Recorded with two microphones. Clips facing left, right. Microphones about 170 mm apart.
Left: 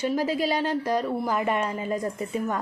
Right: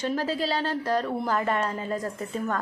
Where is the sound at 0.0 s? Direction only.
10° left (ahead or behind).